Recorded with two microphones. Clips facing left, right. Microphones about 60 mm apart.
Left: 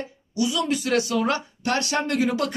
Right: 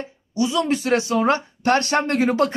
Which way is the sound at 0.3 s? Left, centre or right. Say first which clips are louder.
Right 3 dB; right.